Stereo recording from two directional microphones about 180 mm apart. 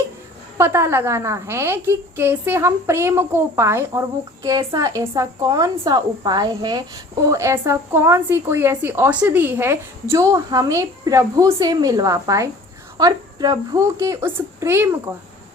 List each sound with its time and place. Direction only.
0.6 s speech: 15° right (ahead or behind)